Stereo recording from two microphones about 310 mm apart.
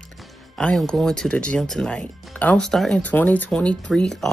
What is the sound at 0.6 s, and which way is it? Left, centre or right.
Speech, centre.